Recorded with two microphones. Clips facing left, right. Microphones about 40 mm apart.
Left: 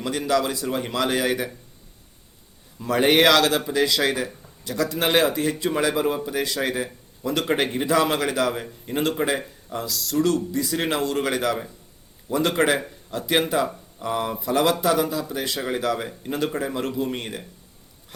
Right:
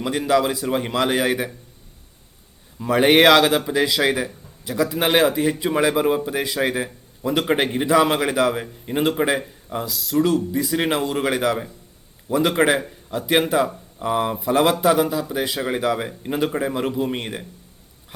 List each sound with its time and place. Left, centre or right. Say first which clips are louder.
0.0 s a man's voice: right 3 dB; centre
2.7 s a man's voice: right 3 dB; centre